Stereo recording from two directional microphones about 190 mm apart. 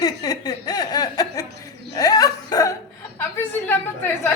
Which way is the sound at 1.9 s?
20° left (ahead or behind).